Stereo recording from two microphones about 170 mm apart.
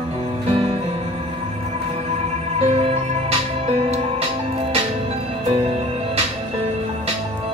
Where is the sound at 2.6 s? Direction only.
35° right (ahead or behind).